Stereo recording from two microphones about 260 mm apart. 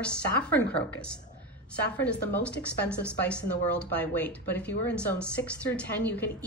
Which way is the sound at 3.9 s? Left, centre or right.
Centre.